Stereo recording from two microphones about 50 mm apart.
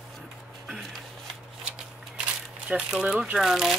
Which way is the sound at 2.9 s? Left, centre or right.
Centre.